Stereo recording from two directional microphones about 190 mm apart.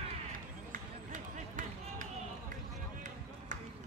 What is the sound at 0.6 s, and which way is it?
Run, 45° right (ahead or behind).